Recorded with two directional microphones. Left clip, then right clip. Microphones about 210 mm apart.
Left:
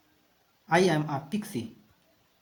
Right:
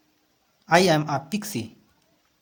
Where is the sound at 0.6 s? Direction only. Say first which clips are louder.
Right 6 dB; 35° right (ahead or behind).